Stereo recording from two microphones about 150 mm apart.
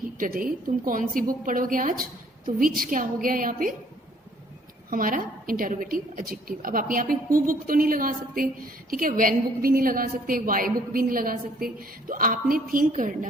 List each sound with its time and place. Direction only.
0.2 s a woman's voice: 65° right (ahead or behind)
4.9 s a woman's voice: 70° right (ahead or behind)